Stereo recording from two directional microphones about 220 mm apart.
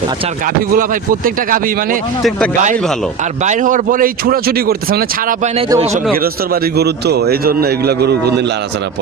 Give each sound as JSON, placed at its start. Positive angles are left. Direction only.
{"t": 0.8, "sound": "speech", "side_deg": -40}
{"t": 3.4, "sound": "speech", "side_deg": -35}
{"t": 5.5, "sound": "speech", "side_deg": -25}
{"t": 6.2, "sound": "a man's voice", "side_deg": -45}